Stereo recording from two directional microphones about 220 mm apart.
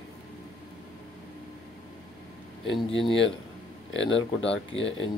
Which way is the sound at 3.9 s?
60° left (ahead or behind).